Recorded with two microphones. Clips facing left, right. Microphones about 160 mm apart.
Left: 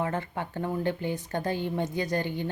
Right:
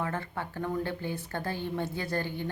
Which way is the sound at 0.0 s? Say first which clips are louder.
Left 3 dB; 20° left (ahead or behind).